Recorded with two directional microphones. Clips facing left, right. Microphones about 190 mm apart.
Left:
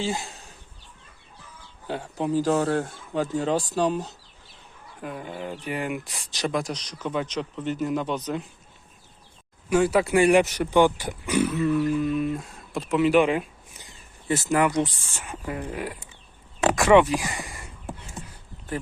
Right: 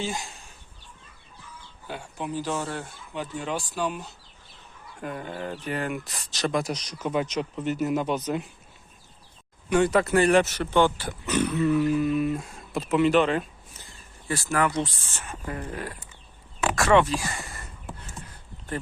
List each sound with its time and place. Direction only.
0.0 s speech: 35° left (ahead or behind)
1.9 s speech: 35° left (ahead or behind)
4.9 s speech: 5° left (ahead or behind)
6.5 s speech: 5° right (ahead or behind)
9.6 s speech: 5° left (ahead or behind)
13.1 s speech: 10° left (ahead or behind)